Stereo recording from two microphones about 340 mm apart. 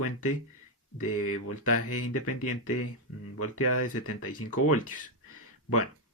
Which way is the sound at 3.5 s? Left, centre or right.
Left.